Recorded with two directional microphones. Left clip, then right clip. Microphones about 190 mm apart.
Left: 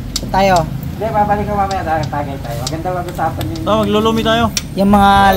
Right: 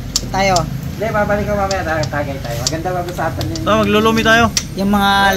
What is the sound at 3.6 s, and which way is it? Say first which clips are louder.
Speech: right 1 dB; centre (ahead or behind).